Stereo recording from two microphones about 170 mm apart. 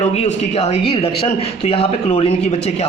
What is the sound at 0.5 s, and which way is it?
Speech, 35° left (ahead or behind).